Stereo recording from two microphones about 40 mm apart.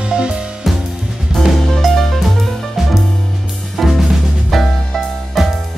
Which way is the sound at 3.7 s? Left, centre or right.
Centre.